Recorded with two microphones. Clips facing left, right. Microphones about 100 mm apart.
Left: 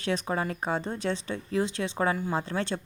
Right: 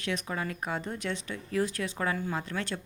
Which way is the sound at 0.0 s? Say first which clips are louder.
Left 4 dB; 35° left (ahead or behind).